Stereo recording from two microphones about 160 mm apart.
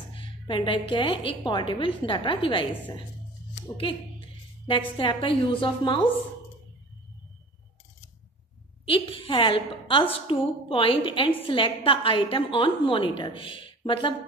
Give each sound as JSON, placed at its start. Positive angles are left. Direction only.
{"t": 0.1, "sound": "a woman's voice", "side_deg": 30}
{"t": 4.6, "sound": "a woman's voice", "side_deg": 30}
{"t": 8.8, "sound": "a woman's voice", "side_deg": 35}